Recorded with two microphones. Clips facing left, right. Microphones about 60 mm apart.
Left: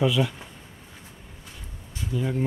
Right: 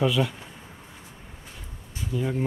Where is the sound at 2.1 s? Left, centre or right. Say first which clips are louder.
Even; centre.